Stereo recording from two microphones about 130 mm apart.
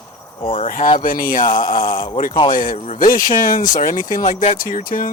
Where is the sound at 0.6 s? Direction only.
90° left.